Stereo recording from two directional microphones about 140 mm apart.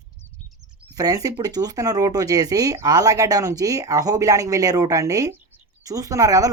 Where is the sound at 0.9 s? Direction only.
25° right (ahead or behind).